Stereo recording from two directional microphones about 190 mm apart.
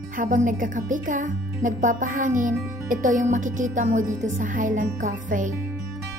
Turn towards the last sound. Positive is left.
turn(degrees=-45)  # may be behind; listen again after turning